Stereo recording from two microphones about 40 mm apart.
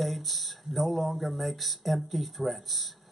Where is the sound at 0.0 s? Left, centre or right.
Centre.